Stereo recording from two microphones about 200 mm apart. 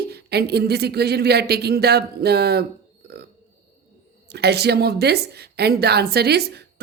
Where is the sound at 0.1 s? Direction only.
55° right (ahead or behind).